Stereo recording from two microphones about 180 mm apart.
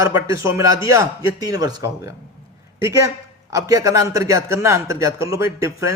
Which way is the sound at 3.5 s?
20° right (ahead or behind).